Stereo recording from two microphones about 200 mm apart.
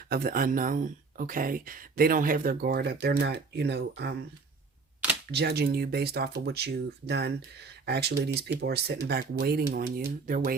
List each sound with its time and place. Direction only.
0.1 s speech: 50° right (ahead or behind)
5.3 s speech: 55° right (ahead or behind)